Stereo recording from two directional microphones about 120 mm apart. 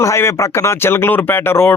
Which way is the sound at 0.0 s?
25° left (ahead or behind).